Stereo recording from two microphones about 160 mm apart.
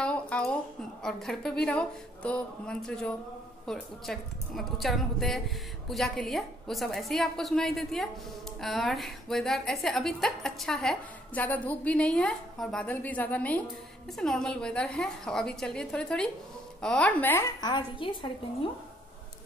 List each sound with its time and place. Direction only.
0.0 s a woman's voice: 5° left (ahead or behind)
17.6 s a woman's voice: 30° left (ahead or behind)